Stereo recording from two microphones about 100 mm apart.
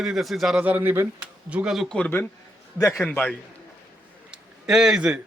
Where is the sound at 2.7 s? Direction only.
30° left (ahead or behind).